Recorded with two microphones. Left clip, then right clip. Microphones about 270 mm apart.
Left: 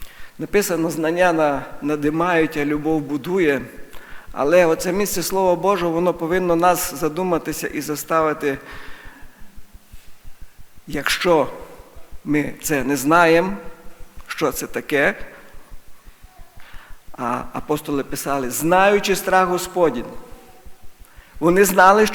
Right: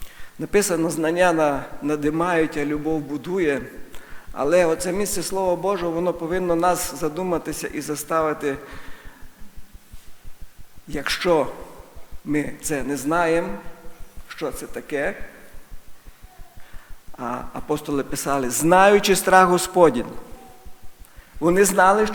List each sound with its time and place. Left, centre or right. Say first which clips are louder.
0.0 s a man's voice: left 1 dB; centre
10.8 s a man's voice: left 3 dB; centre
17.2 s speech: left 5 dB; centre
21.4 s a man's voice: left 3 dB; centre